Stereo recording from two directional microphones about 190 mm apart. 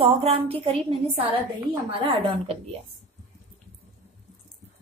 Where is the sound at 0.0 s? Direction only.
30° right (ahead or behind).